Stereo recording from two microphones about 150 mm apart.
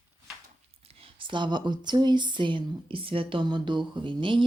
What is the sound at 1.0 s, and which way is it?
Speech, 35° right (ahead or behind).